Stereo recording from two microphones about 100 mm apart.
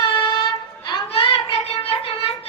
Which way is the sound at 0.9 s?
60° left (ahead or behind).